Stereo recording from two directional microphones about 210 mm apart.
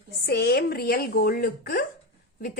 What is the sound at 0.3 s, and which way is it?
A woman's voice, 50° left (ahead or behind).